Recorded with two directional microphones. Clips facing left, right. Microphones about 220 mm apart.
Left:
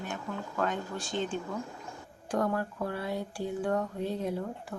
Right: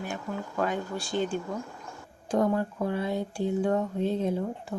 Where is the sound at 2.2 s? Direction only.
20° right (ahead or behind).